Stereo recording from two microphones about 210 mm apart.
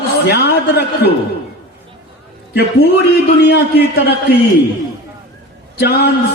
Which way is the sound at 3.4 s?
50° left (ahead or behind).